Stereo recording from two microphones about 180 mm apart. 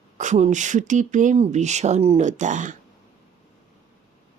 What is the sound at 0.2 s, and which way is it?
Speech, 40° right (ahead or behind).